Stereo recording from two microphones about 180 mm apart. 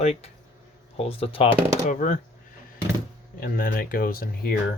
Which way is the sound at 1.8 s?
45° left (ahead or behind).